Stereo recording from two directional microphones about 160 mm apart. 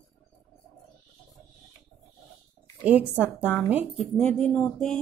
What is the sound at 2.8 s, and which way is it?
Speech, 10° right (ahead or behind).